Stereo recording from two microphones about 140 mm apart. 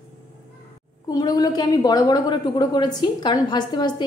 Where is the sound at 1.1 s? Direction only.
30° left (ahead or behind).